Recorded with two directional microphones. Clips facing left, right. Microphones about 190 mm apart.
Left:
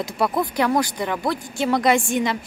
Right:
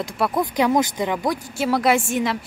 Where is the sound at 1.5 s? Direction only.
5° right (ahead or behind).